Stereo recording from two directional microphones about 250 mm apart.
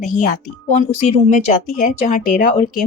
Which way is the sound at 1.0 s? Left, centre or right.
Left.